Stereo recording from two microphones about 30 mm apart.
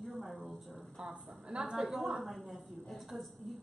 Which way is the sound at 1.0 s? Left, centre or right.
Right.